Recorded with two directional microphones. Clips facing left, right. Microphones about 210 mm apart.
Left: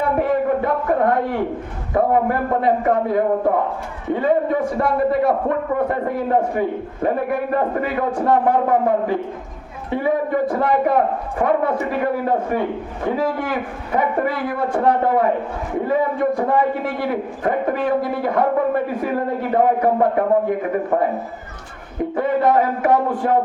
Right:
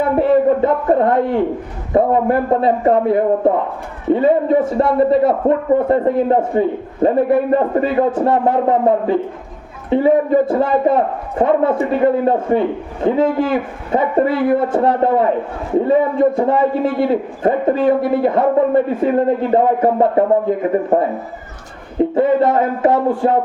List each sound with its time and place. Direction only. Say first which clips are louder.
0.2 s a man's voice: right 8 dB; 25° right (ahead or behind)